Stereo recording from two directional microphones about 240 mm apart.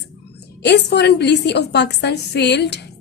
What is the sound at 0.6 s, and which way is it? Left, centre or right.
A woman's voice, left.